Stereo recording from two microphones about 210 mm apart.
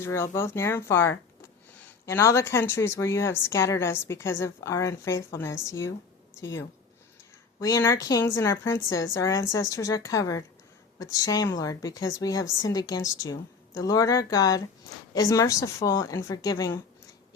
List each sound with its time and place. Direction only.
0.0 s a woman's voice: 10° left (ahead or behind)
7.6 s a woman's voice: 15° left (ahead or behind)